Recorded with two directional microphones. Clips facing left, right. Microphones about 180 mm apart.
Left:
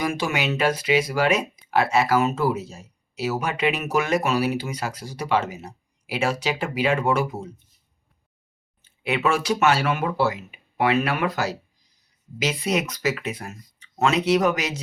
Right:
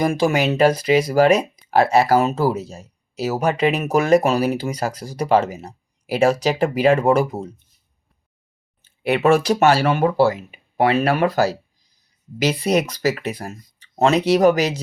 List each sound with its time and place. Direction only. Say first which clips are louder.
0.0 s speech: right 7 dB; 35° right (ahead or behind)
9.2 s speech: right 6 dB; 40° right (ahead or behind)